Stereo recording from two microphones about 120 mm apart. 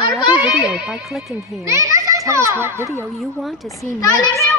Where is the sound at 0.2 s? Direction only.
35° left (ahead or behind).